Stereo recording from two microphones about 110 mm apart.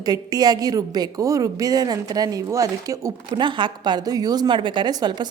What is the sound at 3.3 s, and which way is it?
A woman's voice, 45° right (ahead or behind).